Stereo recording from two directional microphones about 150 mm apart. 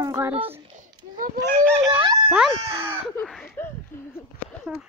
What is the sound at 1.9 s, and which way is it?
Speech, 35° right (ahead or behind).